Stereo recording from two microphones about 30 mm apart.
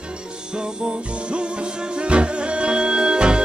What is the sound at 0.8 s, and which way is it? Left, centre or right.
Music, right.